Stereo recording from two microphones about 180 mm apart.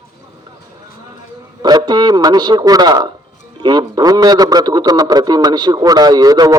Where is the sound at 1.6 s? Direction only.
25° right (ahead or behind).